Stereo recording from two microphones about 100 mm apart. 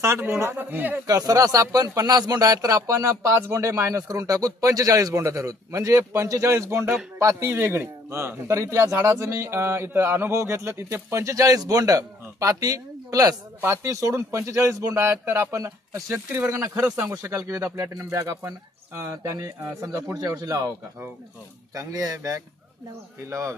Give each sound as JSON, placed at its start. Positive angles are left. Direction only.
{"t": 0.0, "sound": "a man's voice", "side_deg": -25}
{"t": 1.0, "sound": "a man's voice", "side_deg": -35}
{"t": 16.8, "sound": "speech", "side_deg": -15}
{"t": 17.1, "sound": "a man's voice", "side_deg": -30}